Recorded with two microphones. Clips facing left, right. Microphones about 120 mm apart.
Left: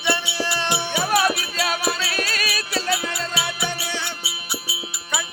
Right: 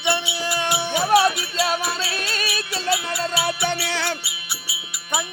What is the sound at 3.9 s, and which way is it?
Music, 90° right.